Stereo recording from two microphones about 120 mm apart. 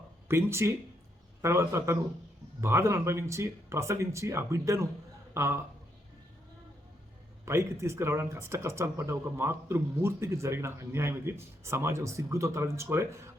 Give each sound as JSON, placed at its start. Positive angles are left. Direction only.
{"t": 0.3, "sound": "speech", "side_deg": -20}
{"t": 7.4, "sound": "speech", "side_deg": -25}